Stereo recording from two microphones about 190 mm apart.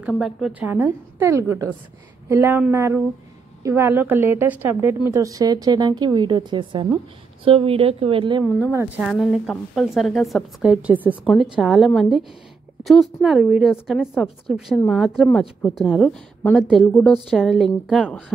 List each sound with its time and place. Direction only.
0.0 s a woman's voice: centre (ahead or behind); by 8.5 s 25° right (ahead or behind)
8.7 s a woman's voice: 10° right (ahead or behind)